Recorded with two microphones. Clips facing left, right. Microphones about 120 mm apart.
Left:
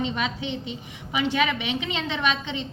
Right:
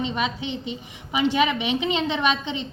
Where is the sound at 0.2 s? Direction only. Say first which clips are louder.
Right 2 dB; 15° right (ahead or behind).